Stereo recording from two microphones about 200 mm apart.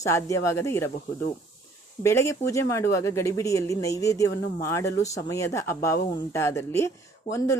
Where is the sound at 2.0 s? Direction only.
15° left (ahead or behind).